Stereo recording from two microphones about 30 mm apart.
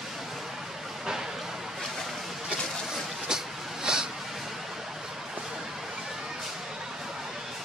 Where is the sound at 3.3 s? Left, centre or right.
Right.